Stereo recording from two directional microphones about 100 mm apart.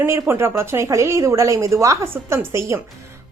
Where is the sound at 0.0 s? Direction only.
25° right (ahead or behind).